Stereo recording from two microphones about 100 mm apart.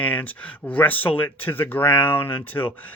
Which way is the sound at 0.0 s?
15° left (ahead or behind).